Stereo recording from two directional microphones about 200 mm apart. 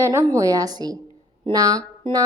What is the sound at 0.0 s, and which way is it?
A woman's voice, 15° right (ahead or behind).